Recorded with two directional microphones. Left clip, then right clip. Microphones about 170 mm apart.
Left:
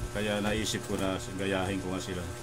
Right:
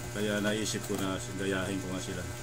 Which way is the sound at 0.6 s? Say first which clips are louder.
Left 1 dB; 50° left (ahead or behind).